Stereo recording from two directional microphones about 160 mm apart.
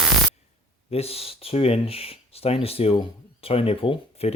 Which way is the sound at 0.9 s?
40° left (ahead or behind).